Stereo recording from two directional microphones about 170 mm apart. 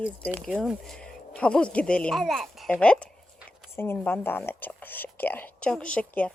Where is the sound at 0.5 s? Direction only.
5° right (ahead or behind).